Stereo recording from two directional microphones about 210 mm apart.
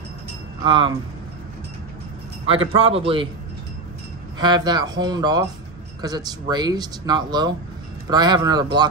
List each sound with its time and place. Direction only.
0.7 s speech: 25° right (ahead or behind)
2.4 s speech: 25° right (ahead or behind)
4.4 s speech: 20° right (ahead or behind)